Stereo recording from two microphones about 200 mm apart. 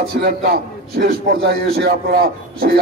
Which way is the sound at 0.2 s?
50° right (ahead or behind).